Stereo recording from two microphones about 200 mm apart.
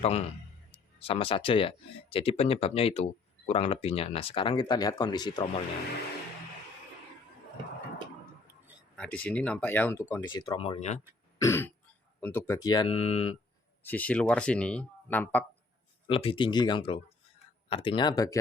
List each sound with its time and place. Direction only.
0.0 s a man's voice: 30° left (ahead or behind)
9.0 s speech: 5° left (ahead or behind); by 11.0 s 35° left (ahead or behind)
11.3 s throat clearing: 15° left (ahead or behind)
12.2 s speech: 10° left (ahead or behind); by 13.3 s 30° left (ahead or behind)
13.8 s speech: 10° left (ahead or behind)
16.0 s speech: 25° left (ahead or behind)